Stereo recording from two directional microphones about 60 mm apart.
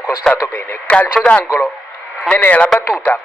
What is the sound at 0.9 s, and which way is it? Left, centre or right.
Speech, left.